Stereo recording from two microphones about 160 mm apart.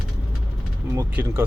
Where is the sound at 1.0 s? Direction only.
15° right (ahead or behind).